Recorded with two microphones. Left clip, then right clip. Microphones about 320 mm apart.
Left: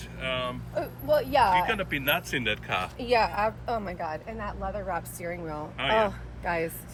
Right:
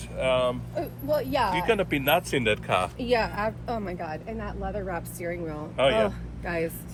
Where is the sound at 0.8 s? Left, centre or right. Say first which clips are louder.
Left 3 dB; left.